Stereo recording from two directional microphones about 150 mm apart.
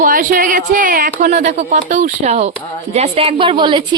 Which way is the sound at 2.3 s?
45° right (ahead or behind).